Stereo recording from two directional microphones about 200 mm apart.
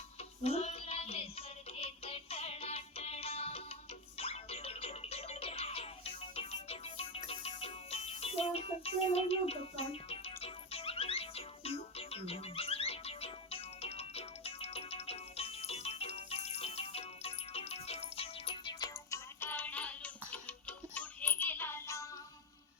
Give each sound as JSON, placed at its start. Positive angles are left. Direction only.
{"t": 0.2, "sound": "music", "side_deg": 30}